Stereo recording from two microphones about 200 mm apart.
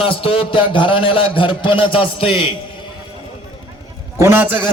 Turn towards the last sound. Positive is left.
turn(degrees=-10)  # may be behind; listen again after turning